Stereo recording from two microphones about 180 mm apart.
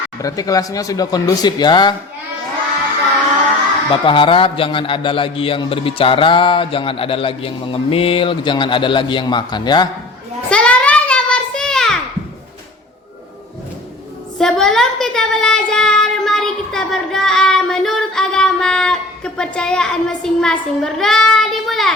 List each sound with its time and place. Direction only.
0.2 s a man's voice: 20° left (ahead or behind)
4.0 s a man's voice: 30° left (ahead or behind)
10.5 s a sound: 5° left (ahead or behind)
14.3 s child singing: 5° left (ahead or behind)